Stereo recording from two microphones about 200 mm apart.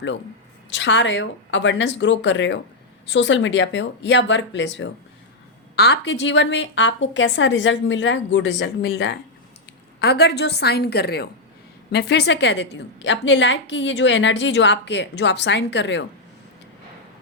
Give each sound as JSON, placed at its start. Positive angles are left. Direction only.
{"t": 0.7, "sound": "a woman's voice", "side_deg": 65}